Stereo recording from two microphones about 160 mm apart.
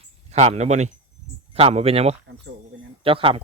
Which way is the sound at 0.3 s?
40° right (ahead or behind).